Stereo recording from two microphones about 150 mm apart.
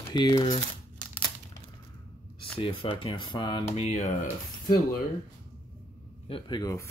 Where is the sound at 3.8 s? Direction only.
50° left (ahead or behind).